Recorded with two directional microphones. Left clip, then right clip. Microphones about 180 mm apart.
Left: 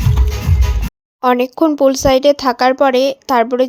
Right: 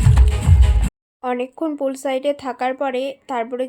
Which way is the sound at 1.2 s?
45° left (ahead or behind).